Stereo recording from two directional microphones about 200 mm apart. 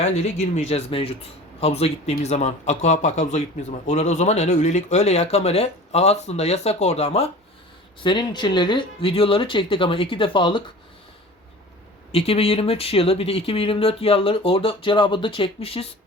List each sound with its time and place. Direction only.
0.0 s speech: 35° left (ahead or behind)
12.1 s speech: 30° left (ahead or behind)